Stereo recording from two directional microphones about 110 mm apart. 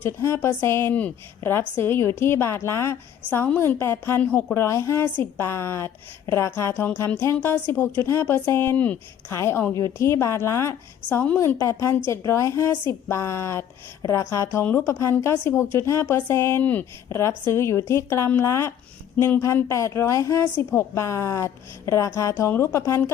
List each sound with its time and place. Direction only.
0.0 s a woman's voice: 20° left (ahead or behind)
4.3 s speech: 10° left (ahead or behind)
4.5 s a woman's voice: 25° left (ahead or behind)